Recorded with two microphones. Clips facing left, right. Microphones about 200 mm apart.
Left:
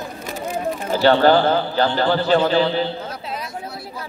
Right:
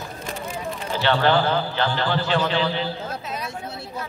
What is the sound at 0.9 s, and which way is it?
A man's voice, 40° left (ahead or behind).